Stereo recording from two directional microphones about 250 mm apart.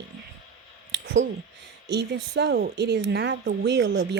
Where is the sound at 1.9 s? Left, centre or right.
Right.